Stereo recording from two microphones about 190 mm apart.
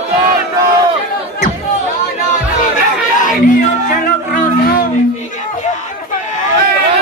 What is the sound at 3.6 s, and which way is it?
Music, 45° left (ahead or behind).